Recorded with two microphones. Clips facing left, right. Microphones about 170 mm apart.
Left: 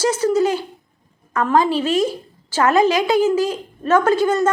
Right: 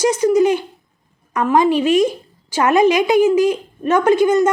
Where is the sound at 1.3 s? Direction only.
15° right (ahead or behind).